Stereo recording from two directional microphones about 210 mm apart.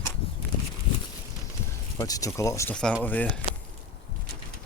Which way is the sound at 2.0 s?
15° left (ahead or behind).